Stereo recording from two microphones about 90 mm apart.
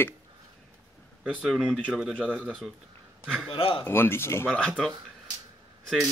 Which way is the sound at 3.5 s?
90° left.